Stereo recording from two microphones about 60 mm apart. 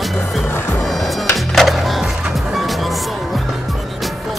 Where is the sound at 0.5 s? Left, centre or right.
Left.